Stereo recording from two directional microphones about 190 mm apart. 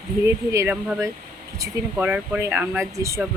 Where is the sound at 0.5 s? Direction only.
10° right (ahead or behind).